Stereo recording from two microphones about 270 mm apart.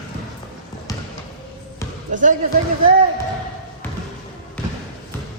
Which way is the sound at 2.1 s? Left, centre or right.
Right.